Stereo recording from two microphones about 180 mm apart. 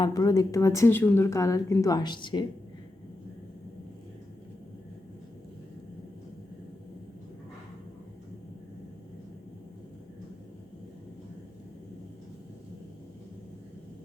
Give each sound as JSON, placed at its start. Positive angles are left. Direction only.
{"t": 0.0, "sound": "speech", "side_deg": 20}